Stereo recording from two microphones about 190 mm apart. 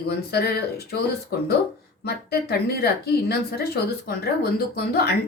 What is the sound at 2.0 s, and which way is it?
Speech, 60° left (ahead or behind).